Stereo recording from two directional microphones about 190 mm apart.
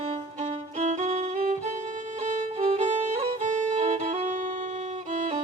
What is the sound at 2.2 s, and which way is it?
Music, 35° right (ahead or behind).